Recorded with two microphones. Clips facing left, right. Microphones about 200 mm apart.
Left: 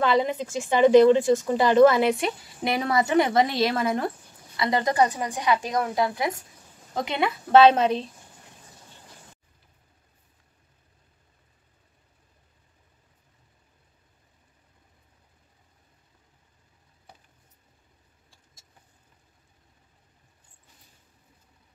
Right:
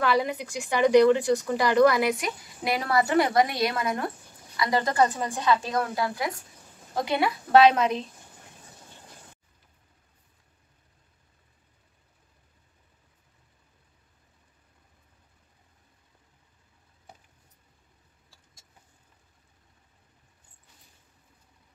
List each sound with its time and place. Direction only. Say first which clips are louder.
0.0 s a woman's voice: left 2 dB; 20° left (ahead or behind)